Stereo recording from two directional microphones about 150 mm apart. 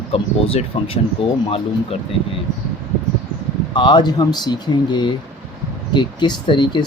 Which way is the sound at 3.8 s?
30° left (ahead or behind).